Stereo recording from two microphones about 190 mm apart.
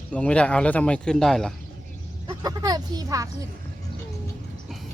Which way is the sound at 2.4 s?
20° right (ahead or behind).